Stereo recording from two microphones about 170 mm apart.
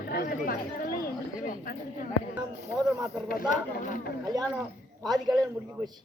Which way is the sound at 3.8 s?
50° left (ahead or behind).